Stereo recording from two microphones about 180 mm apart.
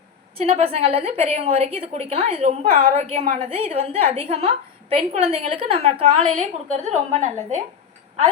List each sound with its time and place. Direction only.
0.3 s a woman's voice: 30° right (ahead or behind)
6.3 s a woman's voice: 40° right (ahead or behind)